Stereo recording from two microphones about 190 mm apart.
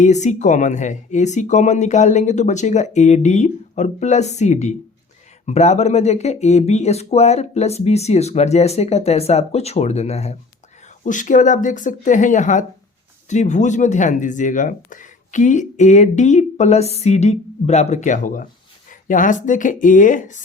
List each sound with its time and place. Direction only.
0.0 s speech: 40° left (ahead or behind)